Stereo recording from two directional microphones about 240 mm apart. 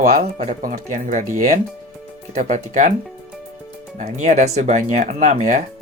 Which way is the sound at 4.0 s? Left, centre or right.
Right.